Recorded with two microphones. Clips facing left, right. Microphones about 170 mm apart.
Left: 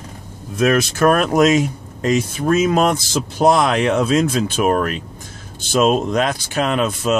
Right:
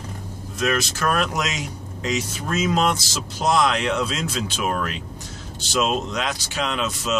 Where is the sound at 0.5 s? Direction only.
55° left (ahead or behind).